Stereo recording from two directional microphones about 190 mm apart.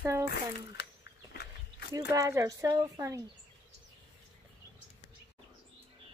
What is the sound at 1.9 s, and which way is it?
Speech, 20° right (ahead or behind).